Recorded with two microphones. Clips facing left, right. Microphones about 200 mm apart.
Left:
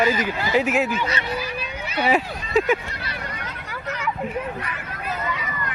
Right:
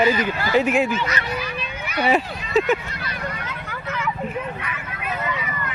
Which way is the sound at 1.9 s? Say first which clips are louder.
Right 1 dB; 5° left (ahead or behind).